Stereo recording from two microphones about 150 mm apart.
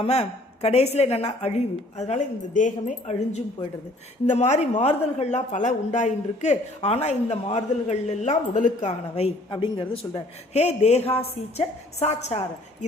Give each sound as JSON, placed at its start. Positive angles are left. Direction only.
{"t": 0.0, "sound": "a man's voice", "side_deg": 45}
{"t": 4.3, "sound": "a man's voice", "side_deg": 50}